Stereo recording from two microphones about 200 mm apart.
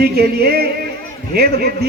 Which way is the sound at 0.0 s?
50° right (ahead or behind).